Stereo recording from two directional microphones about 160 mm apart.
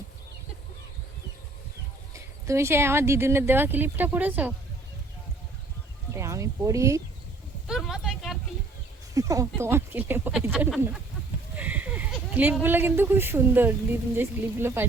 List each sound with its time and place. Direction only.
2.1 s speech: 15° right (ahead or behind)
6.1 s speech: 20° right (ahead or behind)
7.7 s a sound: centre (ahead or behind)
9.1 s speech: 20° right (ahead or behind); by 11.0 s 5° right (ahead or behind)
11.5 s a sound: 10° right (ahead or behind)
12.6 s speech: 15° right (ahead or behind)